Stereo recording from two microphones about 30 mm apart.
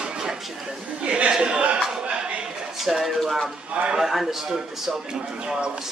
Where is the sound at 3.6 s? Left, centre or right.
Right.